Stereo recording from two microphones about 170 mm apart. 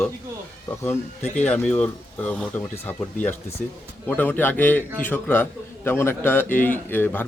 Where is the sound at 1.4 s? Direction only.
10° left (ahead or behind).